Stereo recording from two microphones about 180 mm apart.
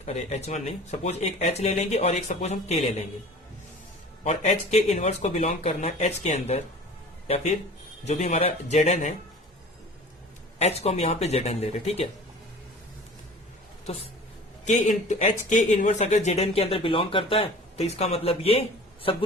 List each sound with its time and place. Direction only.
0.0 s speech: 40° left (ahead or behind)
4.2 s speech: 40° left (ahead or behind)
10.6 s speech: 35° left (ahead or behind)
14.6 s speech: 45° left (ahead or behind)